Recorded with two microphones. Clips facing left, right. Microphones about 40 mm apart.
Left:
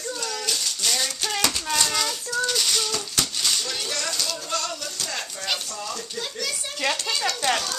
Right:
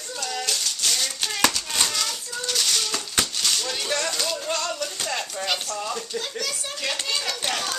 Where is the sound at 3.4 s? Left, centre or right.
Centre.